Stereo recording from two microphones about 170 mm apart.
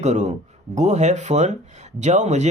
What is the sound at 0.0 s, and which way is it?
Speech, 40° right (ahead or behind).